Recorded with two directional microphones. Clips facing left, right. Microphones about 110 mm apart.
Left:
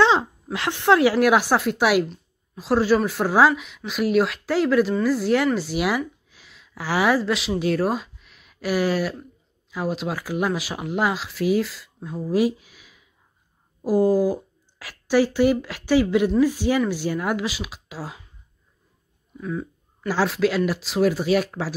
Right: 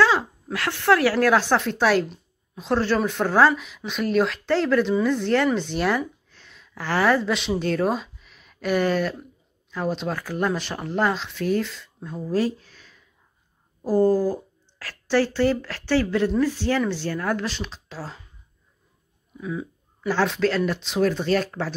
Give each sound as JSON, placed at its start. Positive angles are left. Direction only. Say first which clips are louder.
{"t": 0.0, "sound": "a woman's voice", "louder": "left 2 dB", "side_deg": 25}
{"t": 19.4, "sound": "a sound", "louder": "left 1 dB", "side_deg": 0}
{"t": 20.1, "sound": "speech", "louder": "even", "side_deg": 5}